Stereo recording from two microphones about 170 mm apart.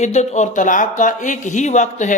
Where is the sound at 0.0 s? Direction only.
40° left (ahead or behind).